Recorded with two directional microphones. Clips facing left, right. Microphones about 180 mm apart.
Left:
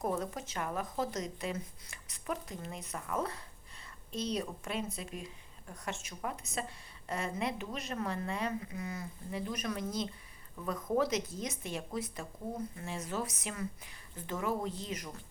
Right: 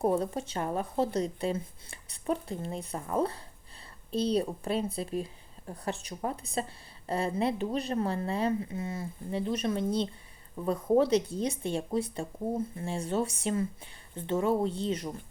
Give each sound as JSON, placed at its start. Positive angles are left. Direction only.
{"t": 0.0, "sound": "speech", "side_deg": -30}